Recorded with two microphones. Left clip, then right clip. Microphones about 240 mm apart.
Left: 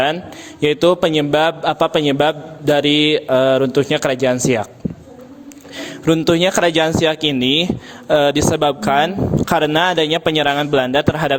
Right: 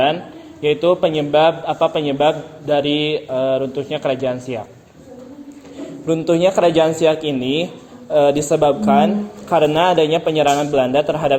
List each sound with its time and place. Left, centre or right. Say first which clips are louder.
0.6 s a man's voice: left 1 dB; left
5.8 s a sound: left 4 dB; left
6.3 s a man's voice: right 5 dB; left